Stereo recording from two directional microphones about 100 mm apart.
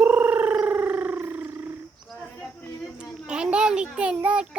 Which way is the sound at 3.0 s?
10° right (ahead or behind).